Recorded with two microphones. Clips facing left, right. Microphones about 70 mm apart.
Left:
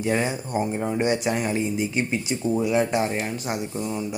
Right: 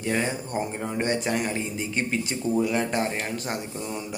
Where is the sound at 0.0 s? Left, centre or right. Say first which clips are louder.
Left 3 dB; centre.